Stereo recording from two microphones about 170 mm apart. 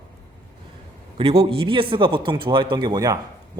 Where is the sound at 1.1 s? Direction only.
35° right (ahead or behind).